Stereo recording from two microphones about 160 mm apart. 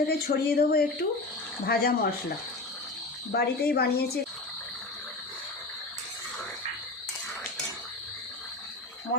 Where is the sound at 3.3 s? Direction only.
80° left.